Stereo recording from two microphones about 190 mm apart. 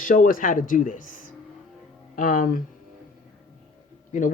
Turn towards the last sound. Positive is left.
turn(degrees=45)  # may be behind; listen again after turning